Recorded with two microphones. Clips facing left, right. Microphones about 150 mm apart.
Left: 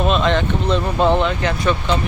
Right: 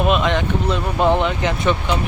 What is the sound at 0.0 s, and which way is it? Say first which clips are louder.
Speech: left 1 dB; 10° right (ahead or behind).